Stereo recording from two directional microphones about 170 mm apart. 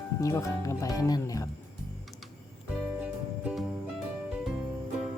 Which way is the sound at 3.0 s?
5° right (ahead or behind).